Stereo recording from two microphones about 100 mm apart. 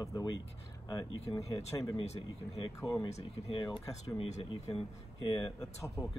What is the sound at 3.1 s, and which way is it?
Speech, 90° left.